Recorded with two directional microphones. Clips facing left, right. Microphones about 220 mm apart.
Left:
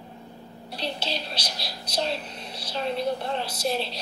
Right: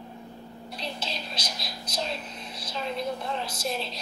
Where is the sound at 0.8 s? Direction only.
30° left (ahead or behind).